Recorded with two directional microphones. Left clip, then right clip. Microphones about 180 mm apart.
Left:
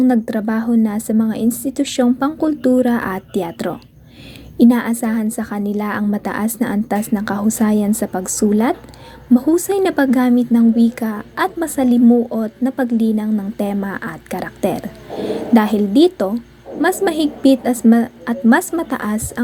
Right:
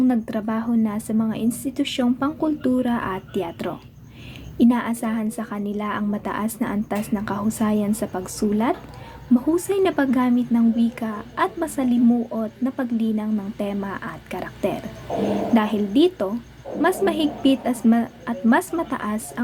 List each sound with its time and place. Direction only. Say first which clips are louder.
0.0 s a woman's voice: left 6 dB; 25° left (ahead or behind)